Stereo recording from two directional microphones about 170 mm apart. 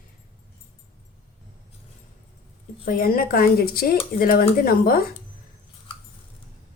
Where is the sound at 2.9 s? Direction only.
60° left (ahead or behind).